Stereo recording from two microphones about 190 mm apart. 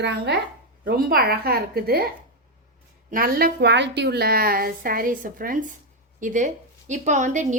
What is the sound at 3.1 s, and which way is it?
A woman's voice, 50° right (ahead or behind).